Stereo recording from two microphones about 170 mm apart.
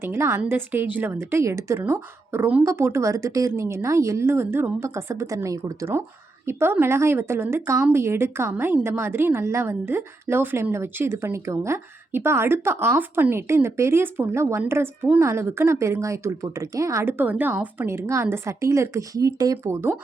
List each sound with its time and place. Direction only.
0.0 s a woman's voice: 15° right (ahead or behind)